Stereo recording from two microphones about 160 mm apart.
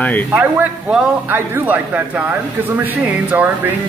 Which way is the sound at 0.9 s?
10° right (ahead or behind).